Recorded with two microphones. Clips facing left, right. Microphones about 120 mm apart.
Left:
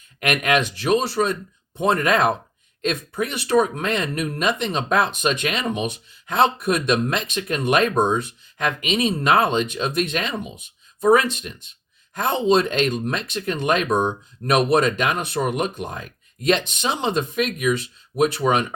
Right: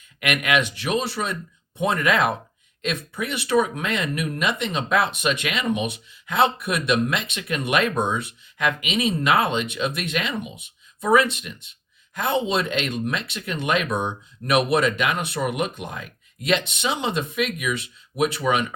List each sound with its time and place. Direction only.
0.2 s speech: 40° left (ahead or behind)